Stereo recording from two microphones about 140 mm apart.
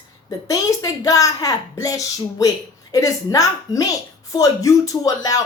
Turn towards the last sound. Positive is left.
turn(degrees=25)  # may be behind; listen again after turning